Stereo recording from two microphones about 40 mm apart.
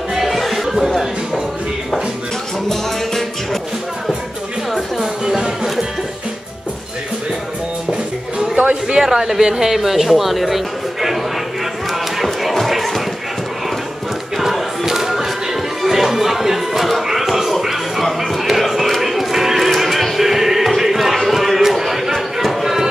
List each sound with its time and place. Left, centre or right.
0.1 s music: centre
4.7 s music: centre
8.4 s music: right
9.0 s speech: centre
11.9 s chop: centre
12.5 s a sound: centre
14.3 s music: centre